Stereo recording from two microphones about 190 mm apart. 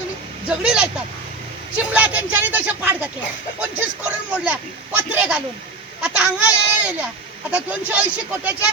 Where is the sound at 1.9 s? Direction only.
10° right (ahead or behind).